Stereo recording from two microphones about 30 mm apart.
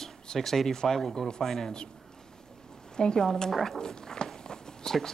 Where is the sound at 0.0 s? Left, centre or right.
Centre.